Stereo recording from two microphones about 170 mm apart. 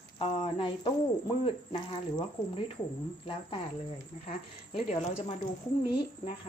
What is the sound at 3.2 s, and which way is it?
Speech, 30° left (ahead or behind).